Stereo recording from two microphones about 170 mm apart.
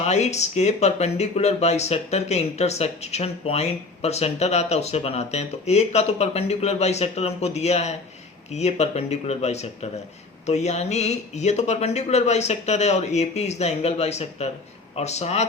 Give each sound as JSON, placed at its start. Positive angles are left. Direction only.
{"t": 0.0, "sound": "speech", "side_deg": 40}